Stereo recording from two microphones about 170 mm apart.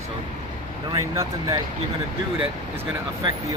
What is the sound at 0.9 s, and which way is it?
Speech, 25° right (ahead or behind).